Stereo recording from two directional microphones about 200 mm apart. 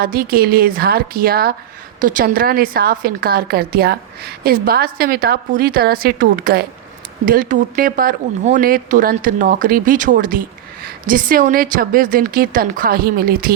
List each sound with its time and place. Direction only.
0.0 s a woman's voice: 45° right (ahead or behind)